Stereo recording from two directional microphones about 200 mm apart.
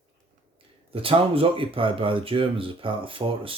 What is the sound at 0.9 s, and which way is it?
Speech, 30° right (ahead or behind).